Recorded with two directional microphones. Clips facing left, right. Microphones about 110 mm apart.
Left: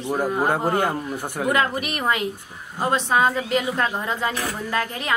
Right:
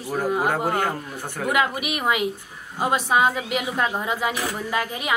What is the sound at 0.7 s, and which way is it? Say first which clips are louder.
Speech: left 2 dB; 15° left (ahead or behind).